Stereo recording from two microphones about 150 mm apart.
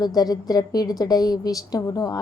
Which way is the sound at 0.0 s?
25° left (ahead or behind).